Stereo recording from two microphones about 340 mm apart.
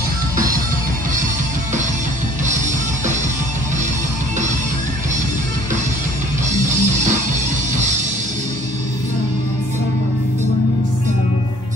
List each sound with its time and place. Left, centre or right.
6.5 s music: right